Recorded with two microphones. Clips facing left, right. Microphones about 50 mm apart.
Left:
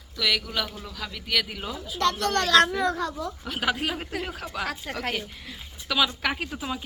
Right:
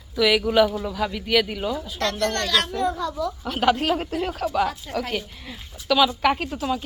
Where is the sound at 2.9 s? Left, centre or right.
Left.